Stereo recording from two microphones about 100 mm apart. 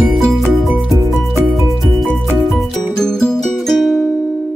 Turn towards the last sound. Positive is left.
turn(degrees=0)  # may be behind; listen again after turning